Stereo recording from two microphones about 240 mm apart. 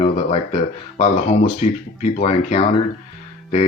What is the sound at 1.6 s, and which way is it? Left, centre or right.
Speech, left.